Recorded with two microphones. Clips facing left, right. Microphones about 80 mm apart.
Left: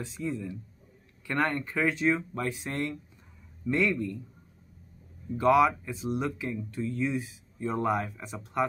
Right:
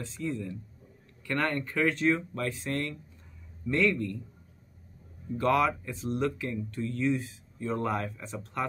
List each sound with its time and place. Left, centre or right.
0.0 s speech: centre
2.3 s speech: centre
5.4 s speech: centre